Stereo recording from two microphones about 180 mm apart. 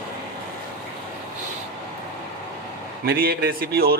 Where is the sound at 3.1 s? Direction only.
55° right (ahead or behind).